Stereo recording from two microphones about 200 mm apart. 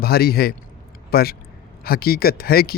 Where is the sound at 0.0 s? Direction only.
50° left (ahead or behind).